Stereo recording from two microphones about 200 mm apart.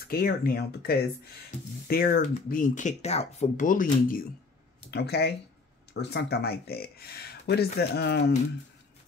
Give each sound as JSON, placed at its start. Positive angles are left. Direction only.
{"t": 0.0, "sound": "speech", "side_deg": 50}
{"t": 4.9, "sound": "speech", "side_deg": 55}